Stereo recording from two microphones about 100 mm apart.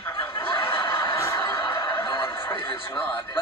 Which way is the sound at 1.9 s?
50° left (ahead or behind).